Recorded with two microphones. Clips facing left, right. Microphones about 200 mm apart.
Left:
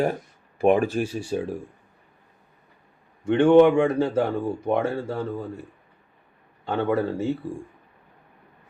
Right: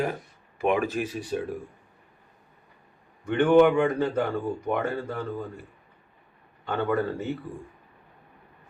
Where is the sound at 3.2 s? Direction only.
25° left (ahead or behind).